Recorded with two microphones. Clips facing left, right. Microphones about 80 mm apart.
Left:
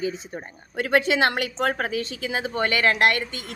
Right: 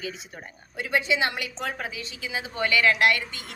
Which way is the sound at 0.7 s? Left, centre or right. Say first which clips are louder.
Left 5 dB; left.